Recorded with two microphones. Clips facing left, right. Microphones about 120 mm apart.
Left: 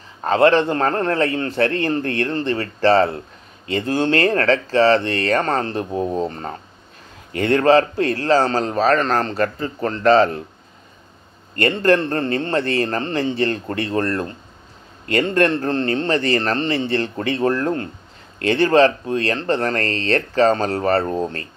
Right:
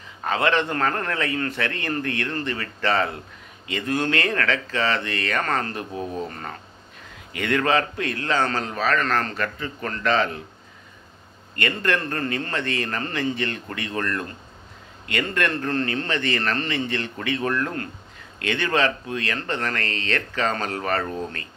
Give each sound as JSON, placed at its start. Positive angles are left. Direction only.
{"t": 0.2, "sound": "a man's voice", "side_deg": 35}
{"t": 11.5, "sound": "a man's voice", "side_deg": 35}